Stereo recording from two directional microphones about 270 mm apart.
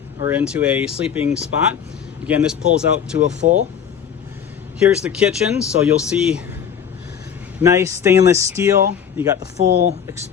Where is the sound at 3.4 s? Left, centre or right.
Right.